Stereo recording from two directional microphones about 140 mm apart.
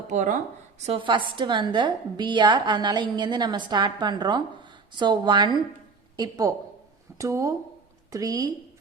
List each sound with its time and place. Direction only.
0.1 s speech: 60° right (ahead or behind)
0.9 s a woman's voice: 35° right (ahead or behind)